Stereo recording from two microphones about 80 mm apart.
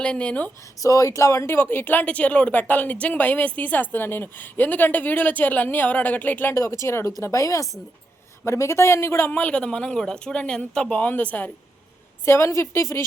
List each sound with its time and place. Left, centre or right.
0.0 s speech: centre
0.8 s a woman's voice: left
6.5 s a woman's voice: left
9.3 s a woman's voice: centre
12.2 s speech: left